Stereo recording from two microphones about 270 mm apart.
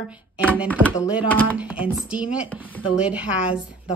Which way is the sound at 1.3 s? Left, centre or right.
Centre.